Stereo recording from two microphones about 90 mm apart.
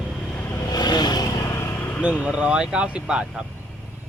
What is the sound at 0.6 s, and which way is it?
Vehicle, 50° left (ahead or behind).